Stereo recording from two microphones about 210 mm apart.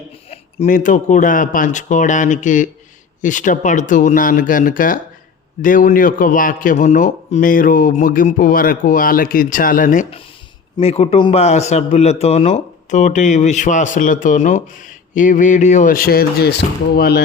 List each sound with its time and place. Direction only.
0.6 s a man's voice: 40° left (ahead or behind)